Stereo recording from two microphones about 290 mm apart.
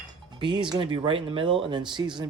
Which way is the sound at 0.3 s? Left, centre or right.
Centre.